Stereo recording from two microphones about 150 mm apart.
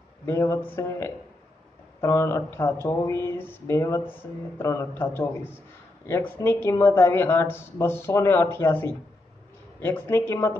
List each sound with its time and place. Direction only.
0.3 s speech: 20° left (ahead or behind)